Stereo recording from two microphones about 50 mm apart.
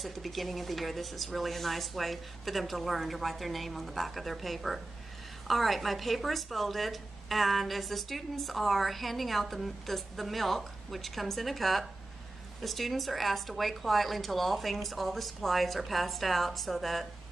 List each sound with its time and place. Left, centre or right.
0.0 s speech: centre